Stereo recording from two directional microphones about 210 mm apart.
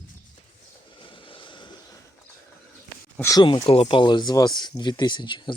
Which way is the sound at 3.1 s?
15° left (ahead or behind).